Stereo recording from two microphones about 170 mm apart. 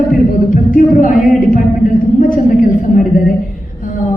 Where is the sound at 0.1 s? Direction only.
55° left (ahead or behind).